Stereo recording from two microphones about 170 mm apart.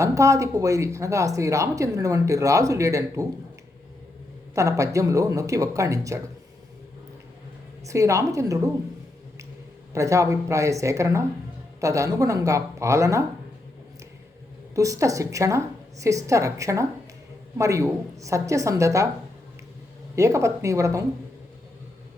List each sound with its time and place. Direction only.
0.0 s speech: 20° right (ahead or behind)
4.5 s speech: 20° right (ahead or behind)
7.9 s a woman's voice: 20° right (ahead or behind)
9.9 s a woman's voice: 15° right (ahead or behind)
14.8 s a woman's voice: 20° right (ahead or behind)
20.1 s a woman's voice: 15° right (ahead or behind)